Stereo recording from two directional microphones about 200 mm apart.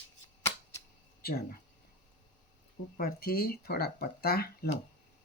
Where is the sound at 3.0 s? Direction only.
50° left (ahead or behind).